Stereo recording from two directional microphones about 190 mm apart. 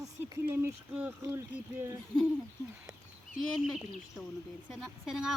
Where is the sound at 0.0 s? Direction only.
10° right (ahead or behind).